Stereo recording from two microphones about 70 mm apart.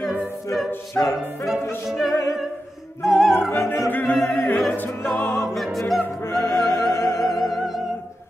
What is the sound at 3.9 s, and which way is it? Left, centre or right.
Music, left.